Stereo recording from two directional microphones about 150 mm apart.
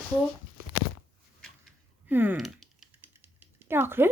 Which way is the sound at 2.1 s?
15° right (ahead or behind).